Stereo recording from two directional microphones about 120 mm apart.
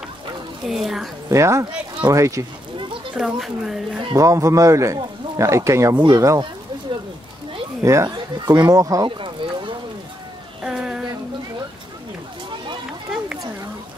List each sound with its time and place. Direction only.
0.7 s speech: centre (ahead or behind)
1.3 s speech: 25° right (ahead or behind)
3.2 s speech: 5° right (ahead or behind)
4.1 s speech: 25° right (ahead or behind)
7.8 s speech: 25° right (ahead or behind)
9.0 s a sound: 45° right (ahead or behind)
10.6 s a sound: 5° right (ahead or behind)